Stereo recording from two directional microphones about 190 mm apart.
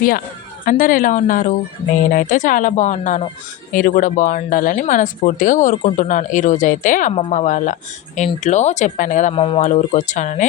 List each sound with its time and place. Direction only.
0.6 s speech: 45° left (ahead or behind)
7.1 s speech: 30° left (ahead or behind)
9.3 s speech: 30° left (ahead or behind)